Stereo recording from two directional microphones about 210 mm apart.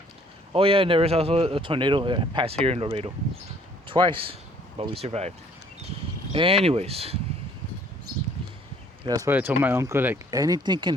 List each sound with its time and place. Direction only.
0.5 s speech: 25° right (ahead or behind)
6.3 s speech: 25° right (ahead or behind)
9.0 s speech: 15° right (ahead or behind)